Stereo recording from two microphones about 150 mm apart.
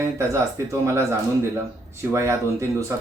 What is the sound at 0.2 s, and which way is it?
Speech, 20° right (ahead or behind).